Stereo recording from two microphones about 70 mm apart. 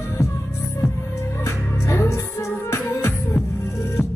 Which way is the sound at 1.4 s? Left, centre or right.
Left.